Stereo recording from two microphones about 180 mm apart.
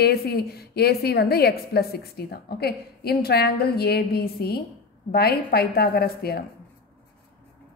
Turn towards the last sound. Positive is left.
turn(degrees=60)  # may be behind; listen again after turning